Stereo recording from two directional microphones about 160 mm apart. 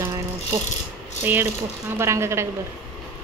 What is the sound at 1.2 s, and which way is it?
Speech, 10° right (ahead or behind).